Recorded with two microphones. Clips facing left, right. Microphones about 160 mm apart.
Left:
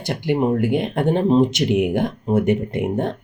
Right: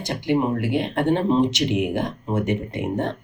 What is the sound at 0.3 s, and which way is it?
Speech, 50° left (ahead or behind).